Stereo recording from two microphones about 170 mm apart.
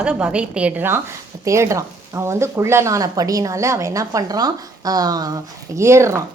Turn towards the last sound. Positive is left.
turn(degrees=-15)  # may be behind; listen again after turning